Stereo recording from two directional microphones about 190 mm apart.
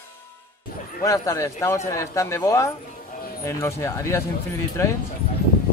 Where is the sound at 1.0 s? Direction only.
15° left (ahead or behind).